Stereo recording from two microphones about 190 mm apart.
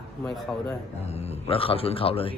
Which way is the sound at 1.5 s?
30° left (ahead or behind).